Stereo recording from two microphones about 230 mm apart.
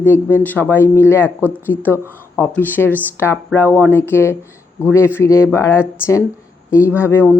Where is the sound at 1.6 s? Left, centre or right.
Centre.